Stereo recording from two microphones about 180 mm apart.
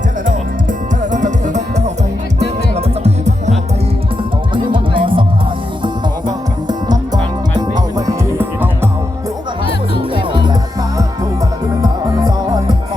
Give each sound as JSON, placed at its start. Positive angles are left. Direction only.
{"t": 0.3, "sound": "music", "side_deg": -45}
{"t": 4.5, "sound": "music", "side_deg": -25}
{"t": 10.2, "sound": "music", "side_deg": -25}